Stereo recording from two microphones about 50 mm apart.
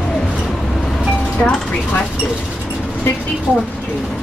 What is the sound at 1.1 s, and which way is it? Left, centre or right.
Music, centre.